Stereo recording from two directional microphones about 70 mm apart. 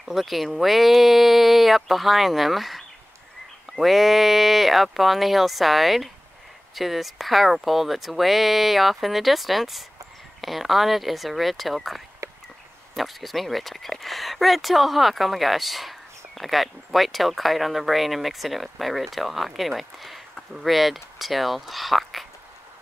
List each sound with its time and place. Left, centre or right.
0.0 s speech: centre
12.2 s a sound: right
12.9 s speech: centre